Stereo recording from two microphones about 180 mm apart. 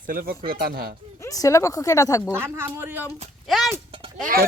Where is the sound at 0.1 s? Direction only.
50° right (ahead or behind).